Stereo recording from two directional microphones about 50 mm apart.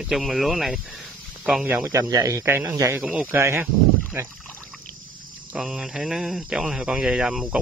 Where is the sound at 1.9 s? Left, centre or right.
Right.